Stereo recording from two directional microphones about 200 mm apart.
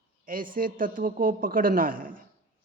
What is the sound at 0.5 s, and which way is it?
Speech, 45° right (ahead or behind).